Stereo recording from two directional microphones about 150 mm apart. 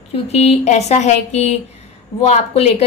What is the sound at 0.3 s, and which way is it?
A woman's voice, 45° left (ahead or behind).